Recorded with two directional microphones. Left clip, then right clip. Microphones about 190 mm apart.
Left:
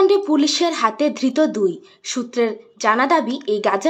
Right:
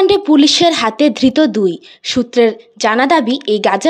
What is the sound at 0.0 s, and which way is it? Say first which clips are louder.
Speech: right 5 dB; 40° right (ahead or behind).